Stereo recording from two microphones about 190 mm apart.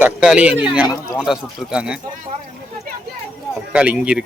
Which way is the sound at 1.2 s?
5° right (ahead or behind).